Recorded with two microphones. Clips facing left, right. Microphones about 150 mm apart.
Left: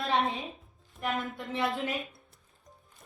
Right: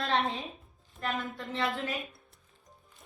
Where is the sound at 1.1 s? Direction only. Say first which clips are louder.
Left 2 dB; centre (ahead or behind).